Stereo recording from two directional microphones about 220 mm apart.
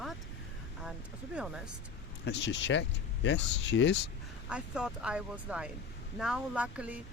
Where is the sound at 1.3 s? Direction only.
Centre (ahead or behind).